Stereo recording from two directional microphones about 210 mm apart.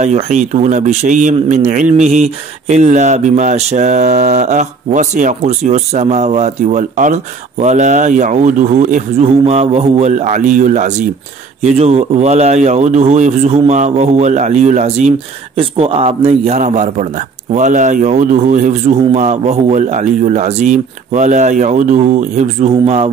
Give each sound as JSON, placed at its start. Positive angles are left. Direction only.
{"t": 0.0, "sound": "a man's voice", "side_deg": -35}